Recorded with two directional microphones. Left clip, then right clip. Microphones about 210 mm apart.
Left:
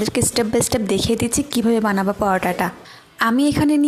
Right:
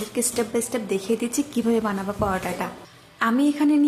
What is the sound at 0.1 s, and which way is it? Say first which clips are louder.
A woman's voice: left 6 dB; 40° left (ahead or behind).